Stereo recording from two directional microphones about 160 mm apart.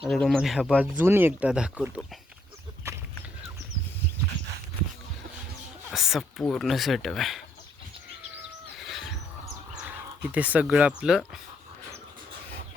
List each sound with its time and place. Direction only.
0.0 s speech: centre (ahead or behind)
0.9 s speech: 15° right (ahead or behind)
2.8 s horse: 15° right (ahead or behind)
5.9 s speech: centre (ahead or behind)
9.7 s speech: 10° right (ahead or behind)